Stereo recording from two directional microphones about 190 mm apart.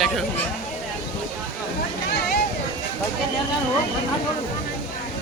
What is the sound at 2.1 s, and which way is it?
Vehicle, 60° left (ahead or behind).